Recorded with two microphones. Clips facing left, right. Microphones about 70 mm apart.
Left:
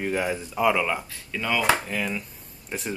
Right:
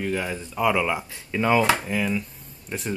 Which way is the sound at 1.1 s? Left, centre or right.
Right.